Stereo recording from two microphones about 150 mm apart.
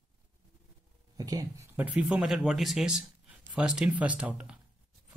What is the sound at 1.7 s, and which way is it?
Speech, 10° right (ahead or behind).